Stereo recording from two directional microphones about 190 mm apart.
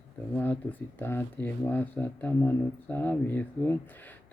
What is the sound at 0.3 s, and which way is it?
Speech, 10° left (ahead or behind).